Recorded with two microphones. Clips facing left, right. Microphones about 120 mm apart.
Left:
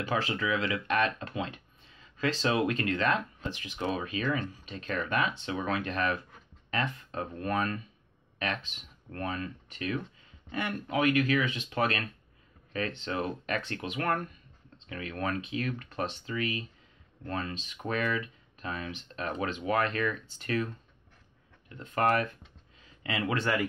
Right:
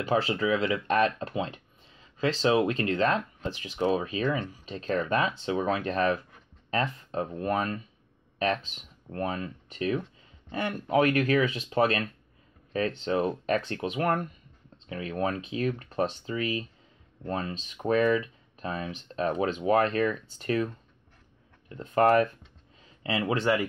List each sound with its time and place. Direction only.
0.1 s speech: 30° right (ahead or behind)
2.6 s speech: 25° right (ahead or behind)